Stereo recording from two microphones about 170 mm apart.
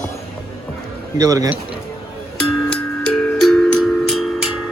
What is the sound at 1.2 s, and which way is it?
Speech, 20° right (ahead or behind).